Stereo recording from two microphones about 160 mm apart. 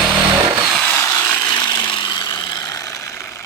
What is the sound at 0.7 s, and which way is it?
Sawing, 10° left (ahead or behind).